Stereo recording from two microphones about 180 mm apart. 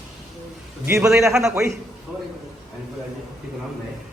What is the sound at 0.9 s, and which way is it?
A man's voice, 15° right (ahead or behind).